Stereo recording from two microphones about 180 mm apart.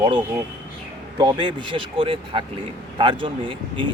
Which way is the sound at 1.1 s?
25° right (ahead or behind).